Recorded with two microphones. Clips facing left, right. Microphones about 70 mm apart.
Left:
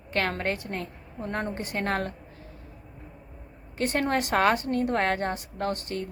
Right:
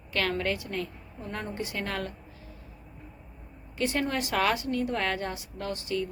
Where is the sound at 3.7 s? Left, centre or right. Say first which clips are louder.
Left 3 dB; left.